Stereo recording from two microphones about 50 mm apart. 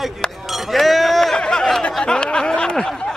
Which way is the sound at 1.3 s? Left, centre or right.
Centre.